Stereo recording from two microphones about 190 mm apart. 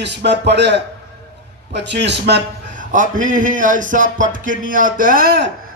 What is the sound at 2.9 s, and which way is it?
Speech, 45° right (ahead or behind).